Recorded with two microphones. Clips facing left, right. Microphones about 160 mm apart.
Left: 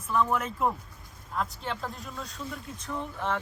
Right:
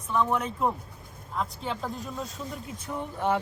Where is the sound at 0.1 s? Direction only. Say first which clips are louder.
Right 1 dB; centre (ahead or behind).